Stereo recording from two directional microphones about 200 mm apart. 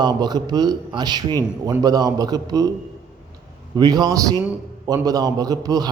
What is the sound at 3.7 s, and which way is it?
A man's voice, 20° right (ahead or behind).